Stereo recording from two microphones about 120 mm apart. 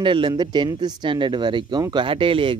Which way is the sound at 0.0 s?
45° right (ahead or behind).